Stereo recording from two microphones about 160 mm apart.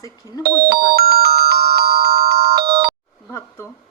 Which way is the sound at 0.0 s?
25° left (ahead or behind).